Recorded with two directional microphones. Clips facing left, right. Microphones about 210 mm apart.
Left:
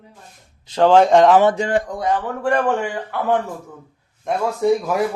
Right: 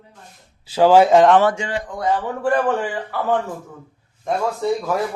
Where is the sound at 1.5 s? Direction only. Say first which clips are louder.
Left 6 dB; 45° left (ahead or behind).